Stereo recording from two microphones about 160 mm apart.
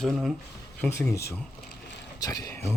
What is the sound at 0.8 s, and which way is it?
Speech, 15° left (ahead or behind).